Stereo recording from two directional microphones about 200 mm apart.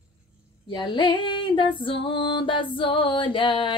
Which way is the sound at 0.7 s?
25° left (ahead or behind).